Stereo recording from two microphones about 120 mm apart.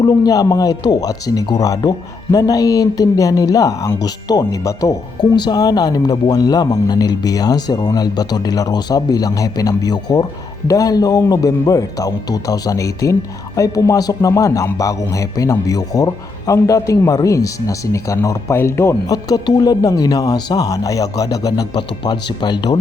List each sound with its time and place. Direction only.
0.0 s speech: 30° left (ahead or behind)